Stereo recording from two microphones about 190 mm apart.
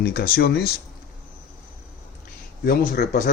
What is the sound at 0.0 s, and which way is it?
Speech, 50° left (ahead or behind).